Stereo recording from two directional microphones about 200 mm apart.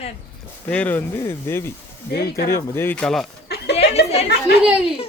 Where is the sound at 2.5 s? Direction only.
10° left (ahead or behind).